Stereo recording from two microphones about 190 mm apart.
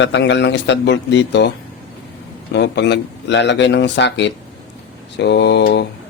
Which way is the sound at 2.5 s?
65° left (ahead or behind).